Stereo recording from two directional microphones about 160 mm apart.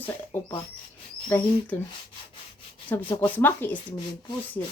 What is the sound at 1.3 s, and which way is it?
Speech, 10° left (ahead or behind).